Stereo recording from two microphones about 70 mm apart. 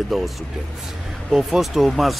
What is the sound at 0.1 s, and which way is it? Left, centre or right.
Speech, centre.